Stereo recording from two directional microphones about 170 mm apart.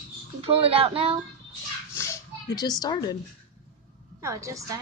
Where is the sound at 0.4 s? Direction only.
35° right (ahead or behind).